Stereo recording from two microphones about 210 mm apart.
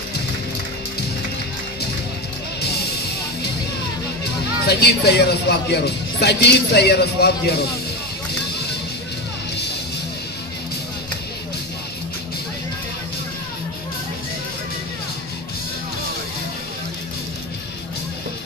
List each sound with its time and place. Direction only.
4.6 s speech: 50° left (ahead or behind)